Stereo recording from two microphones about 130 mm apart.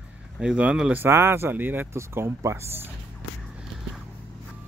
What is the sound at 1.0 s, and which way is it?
Speech, 20° right (ahead or behind).